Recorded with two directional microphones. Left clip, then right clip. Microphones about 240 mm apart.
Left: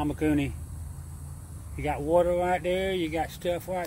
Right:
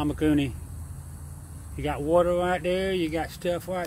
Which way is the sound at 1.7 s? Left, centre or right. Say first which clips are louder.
Right 1 dB; centre.